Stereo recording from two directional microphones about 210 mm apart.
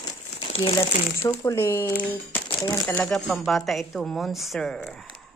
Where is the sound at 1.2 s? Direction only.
15° left (ahead or behind).